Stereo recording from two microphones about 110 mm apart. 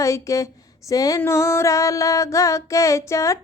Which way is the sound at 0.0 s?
30° left (ahead or behind).